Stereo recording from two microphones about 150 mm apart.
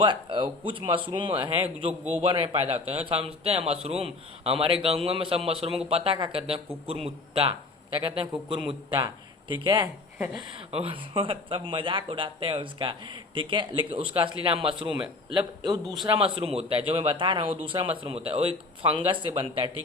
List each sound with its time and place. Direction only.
0.0 s speech: 35° right (ahead or behind)
1.9 s a man's voice: 10° right (ahead or behind)
2.2 s speech: 35° right (ahead or behind)